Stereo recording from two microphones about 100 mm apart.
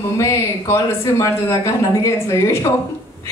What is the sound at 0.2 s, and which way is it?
Speech, 30° left (ahead or behind).